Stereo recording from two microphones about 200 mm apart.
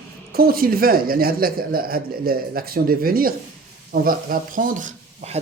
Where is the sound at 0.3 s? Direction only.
50° right (ahead or behind).